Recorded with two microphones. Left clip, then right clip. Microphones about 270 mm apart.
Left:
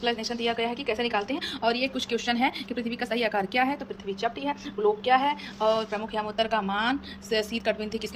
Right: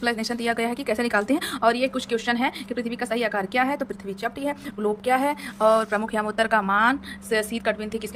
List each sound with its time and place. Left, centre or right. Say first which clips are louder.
0.0 s speech: right 2 dB; centre
3.8 s speech: right 2 dB; right; by 8.0 s centre